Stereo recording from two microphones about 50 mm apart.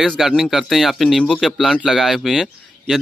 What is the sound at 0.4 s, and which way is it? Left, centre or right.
Speech, centre.